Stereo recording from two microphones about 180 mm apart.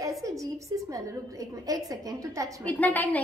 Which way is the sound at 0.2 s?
20° right (ahead or behind).